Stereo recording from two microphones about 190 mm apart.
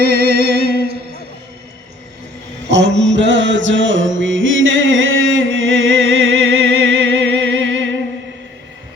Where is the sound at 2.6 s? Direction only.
65° right (ahead or behind); by 5.4 s 90° right.